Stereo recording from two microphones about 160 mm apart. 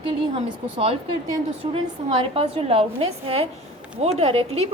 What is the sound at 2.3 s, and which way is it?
A woman's voice, 35° right (ahead or behind).